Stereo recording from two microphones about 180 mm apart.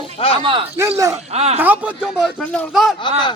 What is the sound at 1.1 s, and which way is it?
Speech, 35° right (ahead or behind).